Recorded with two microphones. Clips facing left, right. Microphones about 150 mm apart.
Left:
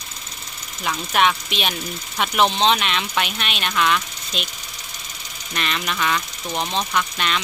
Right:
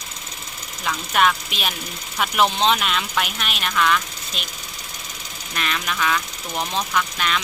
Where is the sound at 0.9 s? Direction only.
Centre (ahead or behind).